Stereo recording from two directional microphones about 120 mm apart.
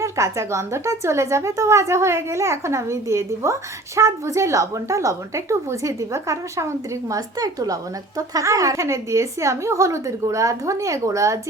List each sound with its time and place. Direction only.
0.0 s a woman's voice: 25° right (ahead or behind)